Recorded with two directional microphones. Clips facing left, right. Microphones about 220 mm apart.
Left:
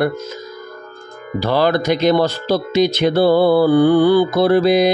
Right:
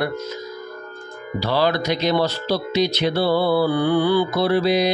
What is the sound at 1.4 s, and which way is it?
A man's voice, 50° left (ahead or behind).